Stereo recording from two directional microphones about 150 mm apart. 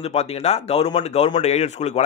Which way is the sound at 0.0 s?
45° left (ahead or behind).